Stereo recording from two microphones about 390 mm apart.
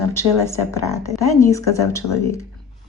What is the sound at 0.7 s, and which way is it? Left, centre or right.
Speech, centre.